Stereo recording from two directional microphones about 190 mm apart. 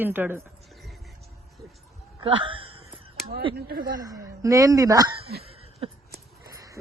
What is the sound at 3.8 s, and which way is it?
Speech, 20° right (ahead or behind).